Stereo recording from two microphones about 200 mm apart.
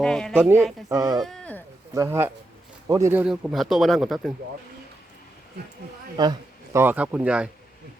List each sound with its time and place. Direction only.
0.0 s speech: 5° left (ahead or behind)
0.3 s speech: 10° right (ahead or behind)
1.2 s speech: 5° left (ahead or behind)
2.0 s speech: 10° right (ahead or behind)
6.2 s speech: 20° right (ahead or behind)